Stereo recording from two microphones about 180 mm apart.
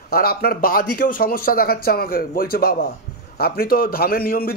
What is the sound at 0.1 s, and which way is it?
Speech, 55° left (ahead or behind).